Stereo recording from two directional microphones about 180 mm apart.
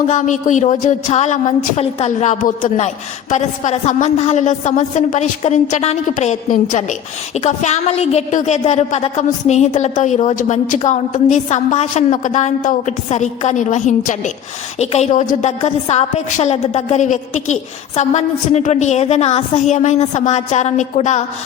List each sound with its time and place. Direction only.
0.1 s a woman's voice: 45° left (ahead or behind)